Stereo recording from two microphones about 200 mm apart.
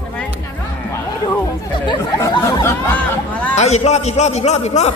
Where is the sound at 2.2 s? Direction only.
15° left (ahead or behind).